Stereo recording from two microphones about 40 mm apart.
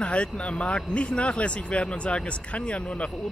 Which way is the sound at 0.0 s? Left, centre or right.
Left.